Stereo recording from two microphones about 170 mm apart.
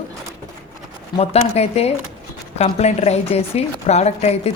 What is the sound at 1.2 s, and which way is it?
A woman's voice, 35° left (ahead or behind).